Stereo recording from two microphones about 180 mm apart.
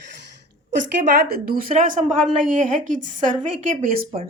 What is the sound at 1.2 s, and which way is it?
A woman's voice, 55° right (ahead or behind).